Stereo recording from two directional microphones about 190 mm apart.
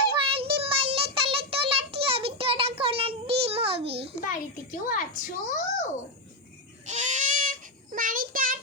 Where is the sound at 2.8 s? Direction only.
30° right (ahead or behind).